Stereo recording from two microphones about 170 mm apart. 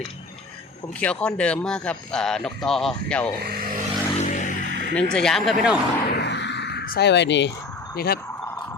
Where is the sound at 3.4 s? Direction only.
65° right (ahead or behind).